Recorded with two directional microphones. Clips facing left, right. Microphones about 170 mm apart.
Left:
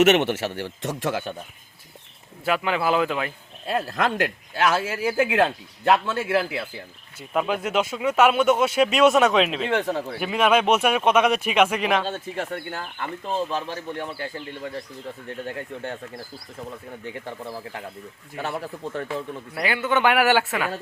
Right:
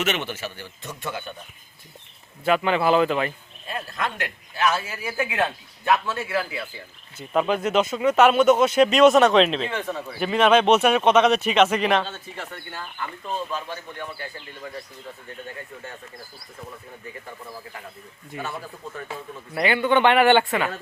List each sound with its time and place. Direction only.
0.0 s a man's voice: 65° left (ahead or behind); by 1.3 s 90° left
2.4 s a man's voice: 5° left (ahead or behind)
3.7 s a man's voice: 75° left (ahead or behind)
7.2 s speech: 5° left (ahead or behind)
12.0 s speech: 45° left (ahead or behind)
13.5 s a man's voice: 35° left (ahead or behind)
15.4 s a man's voice: 70° left (ahead or behind)
17.0 s speech: 80° left
18.3 s speech: 65° left (ahead or behind)
19.5 s a man's voice: 5° left (ahead or behind)